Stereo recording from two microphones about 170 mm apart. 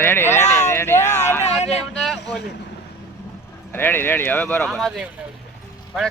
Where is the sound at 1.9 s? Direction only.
5° left (ahead or behind).